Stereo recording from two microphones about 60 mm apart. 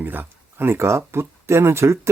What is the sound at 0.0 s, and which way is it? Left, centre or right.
Speech, right.